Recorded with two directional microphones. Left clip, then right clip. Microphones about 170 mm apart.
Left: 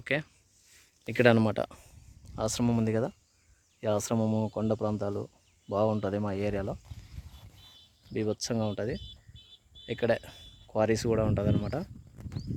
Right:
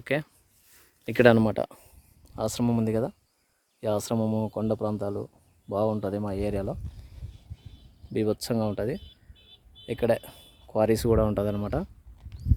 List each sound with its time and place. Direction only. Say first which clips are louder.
0.0 s speech: right 2 dB; 25° right (ahead or behind)
1.0 s speech: right 5 dB; 50° right (ahead or behind)
1.4 s speech: right 3 dB; 15° right (ahead or behind); by 6.7 s 5° left (ahead or behind)
8.1 s speech: right 4 dB; 10° right (ahead or behind)